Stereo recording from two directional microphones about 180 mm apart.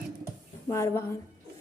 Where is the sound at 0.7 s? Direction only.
15° left (ahead or behind).